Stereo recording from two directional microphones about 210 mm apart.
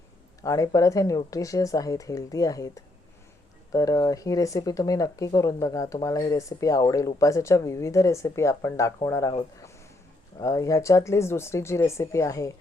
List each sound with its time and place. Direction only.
0.4 s speech: 15° left (ahead or behind)
10.4 s speech: 15° left (ahead or behind)